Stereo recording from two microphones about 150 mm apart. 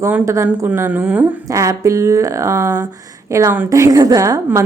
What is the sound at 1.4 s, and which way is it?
Speech, 20° right (ahead or behind).